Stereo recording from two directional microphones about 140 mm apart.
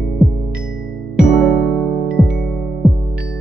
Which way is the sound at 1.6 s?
20° left (ahead or behind).